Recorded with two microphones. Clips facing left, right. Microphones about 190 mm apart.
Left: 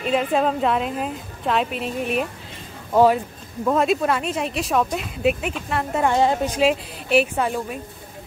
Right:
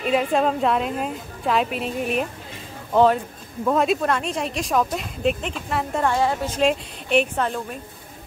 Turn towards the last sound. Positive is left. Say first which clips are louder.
# left 2 dB
turn(degrees=5)  # may be behind; listen again after turning